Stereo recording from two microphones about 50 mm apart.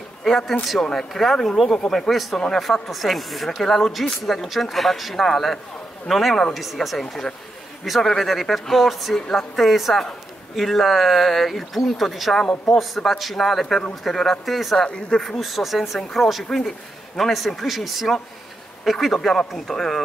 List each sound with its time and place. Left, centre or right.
0.9 s speech: centre
12.4 s speech: centre
12.7 s speech: centre
14.9 s speech: centre
15.2 s speech: centre